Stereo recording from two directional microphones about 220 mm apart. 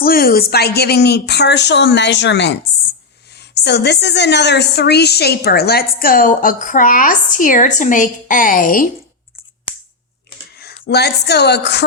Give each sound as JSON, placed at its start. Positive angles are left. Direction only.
{"t": 0.0, "sound": "a woman's voice", "side_deg": 40}
{"t": 10.6, "sound": "a woman's voice", "side_deg": 45}